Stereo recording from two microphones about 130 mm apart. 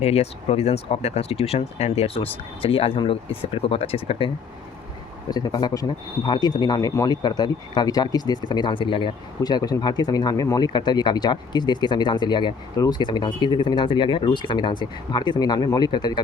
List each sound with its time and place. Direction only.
0.0 s speech: 55° left (ahead or behind)
5.3 s speech: 30° left (ahead or behind)